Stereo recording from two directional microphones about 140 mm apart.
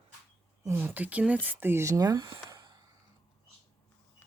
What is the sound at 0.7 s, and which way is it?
Speech, 15° right (ahead or behind).